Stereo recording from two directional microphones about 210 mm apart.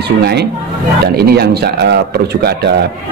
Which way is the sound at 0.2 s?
50° right (ahead or behind).